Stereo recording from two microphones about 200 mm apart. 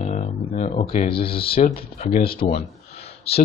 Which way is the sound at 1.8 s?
40° left (ahead or behind).